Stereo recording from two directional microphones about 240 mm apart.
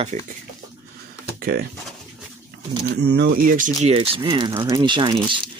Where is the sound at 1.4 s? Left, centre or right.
Right.